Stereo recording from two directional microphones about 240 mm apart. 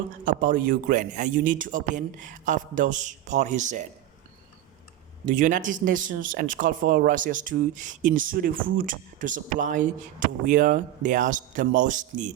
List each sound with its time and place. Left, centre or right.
0.3 s speech: right
5.2 s speech: right